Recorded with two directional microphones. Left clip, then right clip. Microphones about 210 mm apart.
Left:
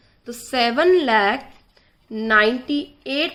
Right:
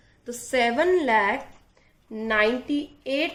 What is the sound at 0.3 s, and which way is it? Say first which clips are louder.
A woman's voice: left 2 dB; 35° left (ahead or behind).